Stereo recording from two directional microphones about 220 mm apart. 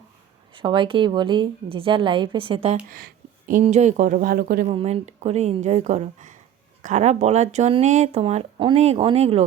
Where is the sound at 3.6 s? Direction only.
30° right (ahead or behind).